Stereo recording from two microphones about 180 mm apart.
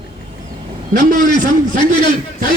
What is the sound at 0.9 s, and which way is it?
Speech, 45° right (ahead or behind).